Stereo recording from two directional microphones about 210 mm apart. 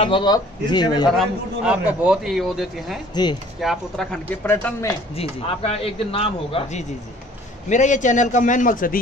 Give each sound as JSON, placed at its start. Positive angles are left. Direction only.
{"t": 0.0, "sound": "speech", "side_deg": 20}
{"t": 1.1, "sound": "a man's voice", "side_deg": 0}
{"t": 5.1, "sound": "a man's voice", "side_deg": 30}